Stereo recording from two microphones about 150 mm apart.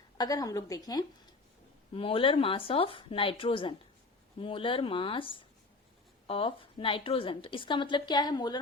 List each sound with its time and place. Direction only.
0.2 s a woman's voice: 25° left (ahead or behind)
1.9 s a woman's voice: 35° left (ahead or behind)